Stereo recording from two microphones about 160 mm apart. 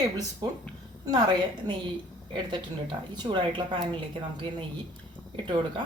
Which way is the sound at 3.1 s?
30° right (ahead or behind).